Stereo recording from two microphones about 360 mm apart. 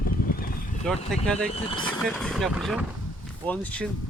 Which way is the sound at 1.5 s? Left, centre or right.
Centre.